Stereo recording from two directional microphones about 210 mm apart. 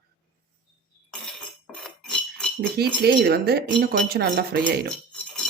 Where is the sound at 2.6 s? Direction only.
50° right (ahead or behind).